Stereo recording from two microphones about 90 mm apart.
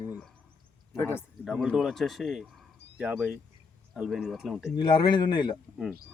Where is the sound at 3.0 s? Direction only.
15° right (ahead or behind).